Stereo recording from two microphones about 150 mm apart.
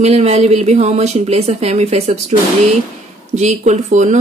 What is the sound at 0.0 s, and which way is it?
A woman's voice, 45° right (ahead or behind).